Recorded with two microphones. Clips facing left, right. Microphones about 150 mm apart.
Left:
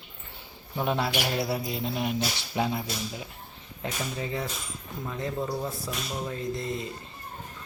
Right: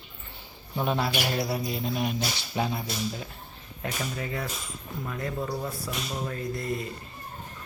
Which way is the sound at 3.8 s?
25° left (ahead or behind).